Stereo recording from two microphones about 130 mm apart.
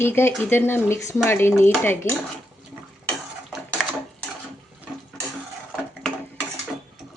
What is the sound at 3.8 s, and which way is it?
Sewing machine, centre (ahead or behind).